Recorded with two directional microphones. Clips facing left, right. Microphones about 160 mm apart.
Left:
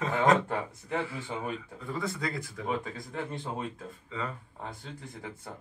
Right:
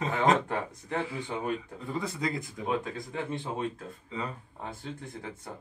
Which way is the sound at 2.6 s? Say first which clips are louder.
Right 2 dB; centre (ahead or behind).